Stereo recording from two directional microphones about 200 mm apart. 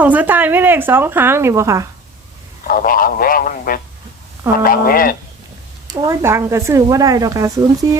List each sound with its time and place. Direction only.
0.0 s speech: 10° right (ahead or behind)
2.6 s speech: 45° left (ahead or behind)
5.9 s speech: 20° right (ahead or behind)